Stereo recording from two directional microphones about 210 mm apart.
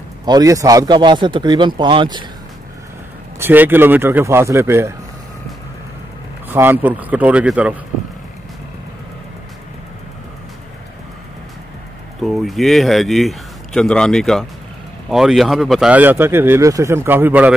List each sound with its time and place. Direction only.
0.2 s speech: 20° right (ahead or behind)
3.3 s speech: 10° right (ahead or behind)
6.5 s speech: 10° right (ahead or behind)
12.2 s speech: centre (ahead or behind)